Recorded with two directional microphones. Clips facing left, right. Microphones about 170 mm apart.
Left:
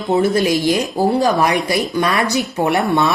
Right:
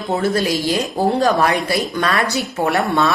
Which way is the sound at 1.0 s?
15° left (ahead or behind).